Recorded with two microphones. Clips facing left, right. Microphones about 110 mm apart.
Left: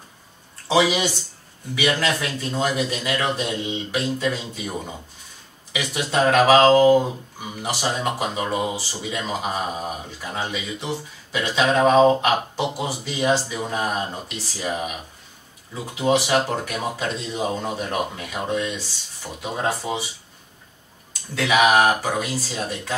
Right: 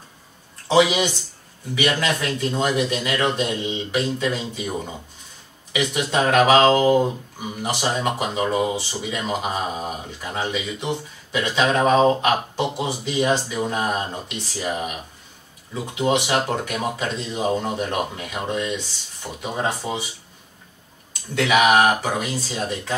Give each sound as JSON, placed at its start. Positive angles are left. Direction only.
{"t": 0.7, "sound": "speech", "side_deg": 0}
{"t": 21.4, "sound": "speech", "side_deg": 0}